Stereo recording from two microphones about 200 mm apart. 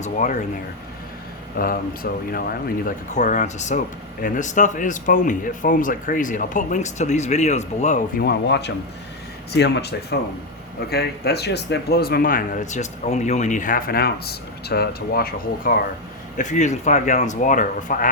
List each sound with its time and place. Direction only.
0.0 s speech: 40° left (ahead or behind)
1.5 s speech: 45° left (ahead or behind)
8.2 s speech: 55° left (ahead or behind)
16.4 s speech: 35° left (ahead or behind)